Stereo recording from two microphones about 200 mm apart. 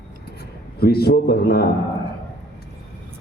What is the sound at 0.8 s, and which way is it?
Speech, 50° left (ahead or behind).